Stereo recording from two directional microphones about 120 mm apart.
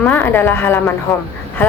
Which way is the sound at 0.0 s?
15° left (ahead or behind).